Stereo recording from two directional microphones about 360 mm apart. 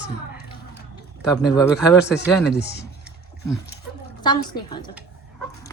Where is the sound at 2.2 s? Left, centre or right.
Left.